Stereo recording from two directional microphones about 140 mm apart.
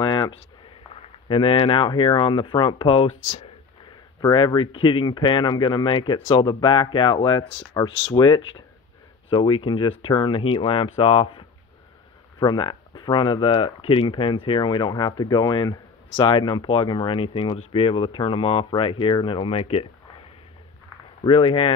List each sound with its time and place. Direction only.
0.0 s a sound: 30° left (ahead or behind)
1.3 s speech: 40° left (ahead or behind)
4.2 s speech: 30° left (ahead or behind)
21.2 s speech: 40° left (ahead or behind)